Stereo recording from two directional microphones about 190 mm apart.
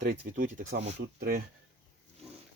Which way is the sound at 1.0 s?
60° right (ahead or behind).